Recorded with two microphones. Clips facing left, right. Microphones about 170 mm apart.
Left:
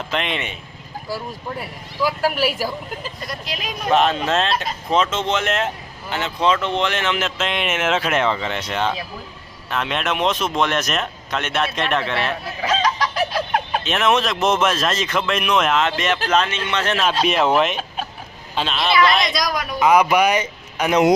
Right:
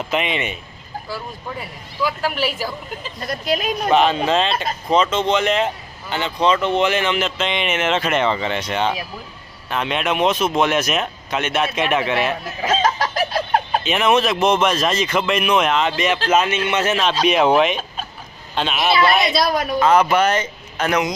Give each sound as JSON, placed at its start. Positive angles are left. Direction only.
{"t": 0.1, "sound": "speech", "side_deg": -5}
{"t": 2.0, "sound": "speech", "side_deg": 5}
{"t": 3.2, "sound": "speech", "side_deg": -45}
{"t": 3.9, "sound": "speech", "side_deg": 0}
{"t": 12.6, "sound": "chicken", "side_deg": -45}
{"t": 13.8, "sound": "a man's voice", "side_deg": 0}
{"t": 19.3, "sound": "speech", "side_deg": -30}
{"t": 19.8, "sound": "speech", "side_deg": 15}